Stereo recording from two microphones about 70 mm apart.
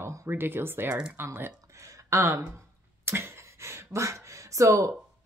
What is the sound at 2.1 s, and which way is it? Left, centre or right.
Speech, right.